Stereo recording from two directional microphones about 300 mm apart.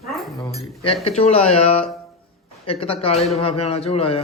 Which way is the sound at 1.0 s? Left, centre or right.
Left.